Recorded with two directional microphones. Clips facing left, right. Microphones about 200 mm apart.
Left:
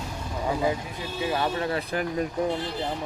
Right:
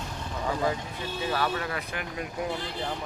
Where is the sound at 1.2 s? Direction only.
25° left (ahead or behind).